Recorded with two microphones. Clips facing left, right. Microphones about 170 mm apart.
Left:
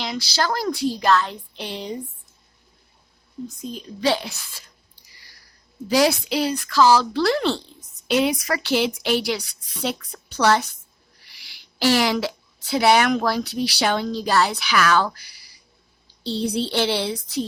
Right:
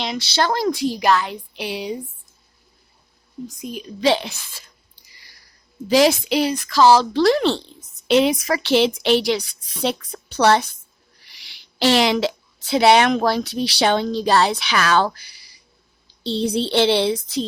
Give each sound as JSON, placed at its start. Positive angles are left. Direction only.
{"t": 0.0, "sound": "speech", "side_deg": -25}
{"t": 3.4, "sound": "speech", "side_deg": -15}
{"t": 5.9, "sound": "a woman's voice", "side_deg": -20}